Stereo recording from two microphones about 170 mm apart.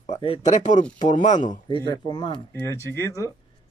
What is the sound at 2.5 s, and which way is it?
Speech, 15° left (ahead or behind).